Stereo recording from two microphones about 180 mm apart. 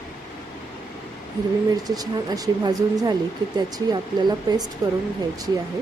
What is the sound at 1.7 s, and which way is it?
A woman's voice, 20° right (ahead or behind).